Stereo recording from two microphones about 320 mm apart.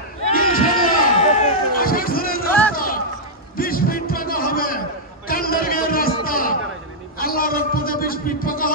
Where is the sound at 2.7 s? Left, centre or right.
Left.